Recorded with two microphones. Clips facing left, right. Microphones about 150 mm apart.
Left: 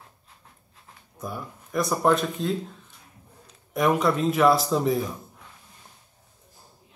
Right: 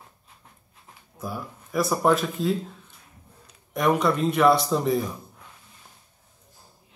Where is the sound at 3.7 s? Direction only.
Centre (ahead or behind).